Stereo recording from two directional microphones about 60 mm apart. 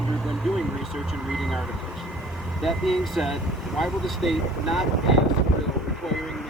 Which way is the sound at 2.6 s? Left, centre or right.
Centre.